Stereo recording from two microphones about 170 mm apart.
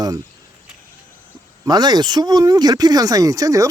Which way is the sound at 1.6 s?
25° right (ahead or behind).